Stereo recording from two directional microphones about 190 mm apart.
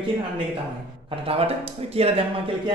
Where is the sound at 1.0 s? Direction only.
30° right (ahead or behind).